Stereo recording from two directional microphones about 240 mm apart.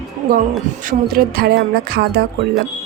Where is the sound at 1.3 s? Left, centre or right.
Right.